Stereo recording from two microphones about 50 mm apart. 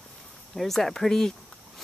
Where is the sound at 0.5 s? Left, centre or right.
Centre.